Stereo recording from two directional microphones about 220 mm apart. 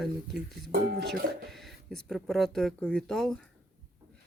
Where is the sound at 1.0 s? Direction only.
45° right (ahead or behind).